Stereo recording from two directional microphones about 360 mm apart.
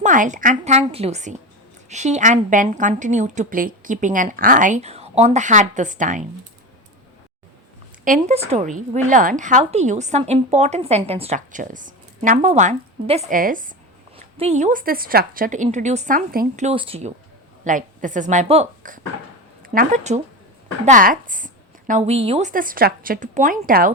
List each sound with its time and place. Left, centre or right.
0.0 s a woman's voice: right
8.0 s a woman's voice: centre